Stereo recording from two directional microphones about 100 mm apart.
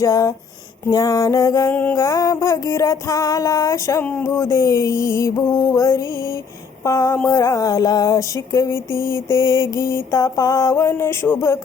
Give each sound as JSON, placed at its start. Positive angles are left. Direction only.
{"t": 0.0, "sound": "music", "side_deg": 35}
{"t": 1.7, "sound": "speech", "side_deg": 15}
{"t": 2.0, "sound": "music", "side_deg": 30}
{"t": 4.0, "sound": "speech", "side_deg": 15}
{"t": 4.3, "sound": "music", "side_deg": 30}